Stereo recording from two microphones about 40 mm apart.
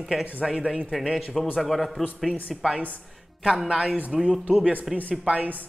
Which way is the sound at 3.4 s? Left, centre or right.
Centre.